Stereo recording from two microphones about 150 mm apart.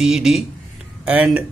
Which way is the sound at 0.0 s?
5° right (ahead or behind).